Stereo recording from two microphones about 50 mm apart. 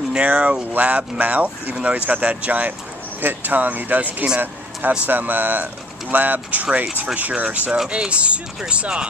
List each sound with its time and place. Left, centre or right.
0.1 s speech: right
3.2 s speech: right
7.7 s speech: centre